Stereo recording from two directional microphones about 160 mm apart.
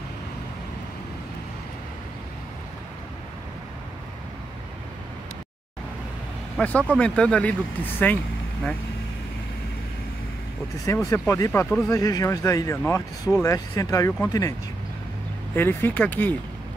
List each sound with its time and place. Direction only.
6.5 s speech: 10° left (ahead or behind)
11.1 s speech: 20° left (ahead or behind)
15.5 s speech: 15° left (ahead or behind)